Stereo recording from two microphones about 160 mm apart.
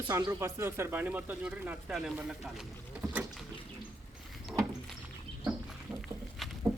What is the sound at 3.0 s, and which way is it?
Boat, 20° right (ahead or behind).